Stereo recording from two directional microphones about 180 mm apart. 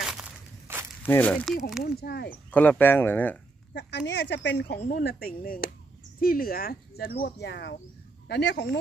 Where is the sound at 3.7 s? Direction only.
75° left (ahead or behind).